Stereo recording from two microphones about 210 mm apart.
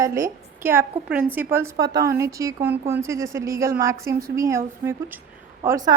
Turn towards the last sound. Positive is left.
turn(degrees=-15)  # may be behind; listen again after turning